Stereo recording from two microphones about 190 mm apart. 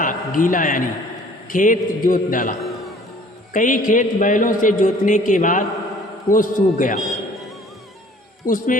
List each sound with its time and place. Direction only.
0.0 s a man's voice: 45° left (ahead or behind)
2.6 s music: centre (ahead or behind)
3.5 s a man's voice: 45° left (ahead or behind)
8.4 s a man's voice: 45° left (ahead or behind)